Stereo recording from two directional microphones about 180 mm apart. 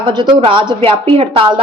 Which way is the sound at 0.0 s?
25° right (ahead or behind).